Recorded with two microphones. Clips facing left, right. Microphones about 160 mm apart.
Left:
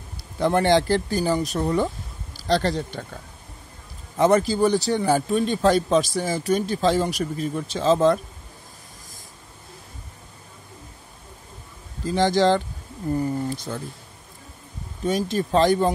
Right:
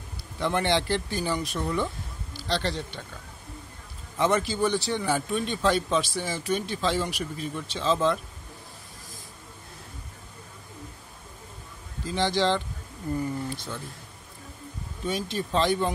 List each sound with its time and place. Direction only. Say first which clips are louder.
0.4 s speech: left 7 dB; 40° left (ahead or behind)
4.2 s speech: left 6 dB; 40° left (ahead or behind)
12.1 s speech: left 6 dB; 45° left (ahead or behind)
15.0 s speech: left 7 dB; 45° left (ahead or behind)